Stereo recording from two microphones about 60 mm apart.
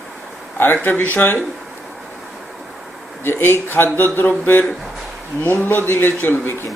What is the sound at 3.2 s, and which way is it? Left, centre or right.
Speech, left.